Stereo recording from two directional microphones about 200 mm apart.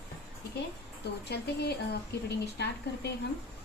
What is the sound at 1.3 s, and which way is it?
Speech, 55° left (ahead or behind).